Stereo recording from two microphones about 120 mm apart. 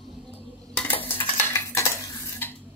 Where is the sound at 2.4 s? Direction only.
20° left (ahead or behind).